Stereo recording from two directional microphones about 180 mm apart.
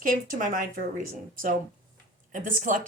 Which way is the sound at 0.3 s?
50° right (ahead or behind).